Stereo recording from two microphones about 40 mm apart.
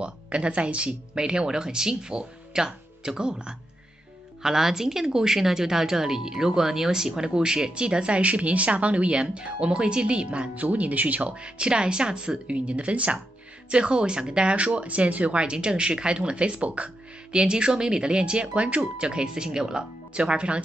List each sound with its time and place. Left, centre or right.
0.0 s speech: right
10.5 s speech: right; by 12.4 s centre
12.4 s speech: right